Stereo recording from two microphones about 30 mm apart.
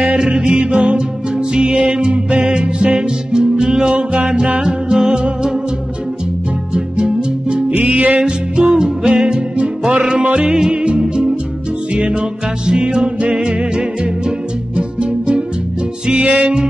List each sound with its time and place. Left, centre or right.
0.2 s music: right
3.3 s music: right
3.9 s music: right
4.6 s music: right
6.7 s music: right
7.9 s music: right
8.2 s music: right
10.2 s music: right
10.5 s music: right
11.9 s music: right
12.6 s music: right
16.2 s music: right